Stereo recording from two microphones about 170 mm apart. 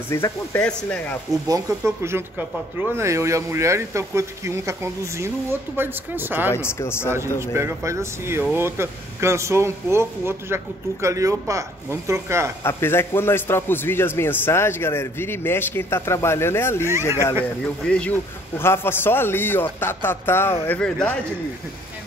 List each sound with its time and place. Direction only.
0.1 s a man's voice: 15° left (ahead or behind)
1.5 s speech: 15° right (ahead or behind)
6.5 s a man's voice: 15° left (ahead or behind)
7.5 s speech: 15° right (ahead or behind)
12.6 s a man's voice: 15° left (ahead or behind)
17.8 s a man's voice: 5° left (ahead or behind)